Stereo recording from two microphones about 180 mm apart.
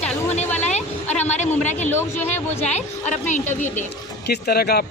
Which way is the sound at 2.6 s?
40° left (ahead or behind).